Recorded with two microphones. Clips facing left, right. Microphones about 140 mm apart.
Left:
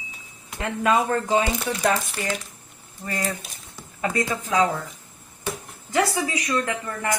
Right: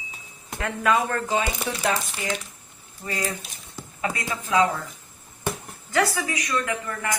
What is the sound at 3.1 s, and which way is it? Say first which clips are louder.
Speech: left 1 dB; 45° left (ahead or behind).